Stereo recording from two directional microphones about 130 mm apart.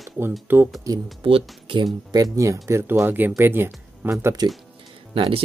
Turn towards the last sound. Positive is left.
turn(degrees=-45)  # may be behind; listen again after turning